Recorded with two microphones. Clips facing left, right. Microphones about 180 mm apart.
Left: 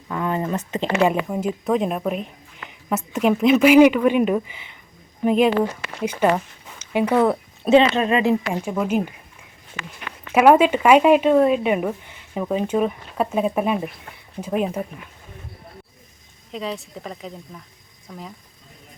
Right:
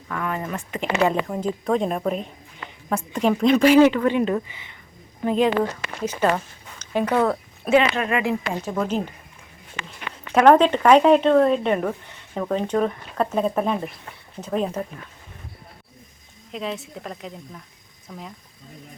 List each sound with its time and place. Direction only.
0.1 s speech: 25° left (ahead or behind)
1.0 s a woman's voice: 10° left (ahead or behind)
6.9 s speech: 15° left (ahead or behind)
7.6 s speech: 25° left (ahead or behind)
8.6 s speech: 10° left (ahead or behind)
10.3 s speech: 10° left (ahead or behind)
16.5 s a woman's voice: centre (ahead or behind)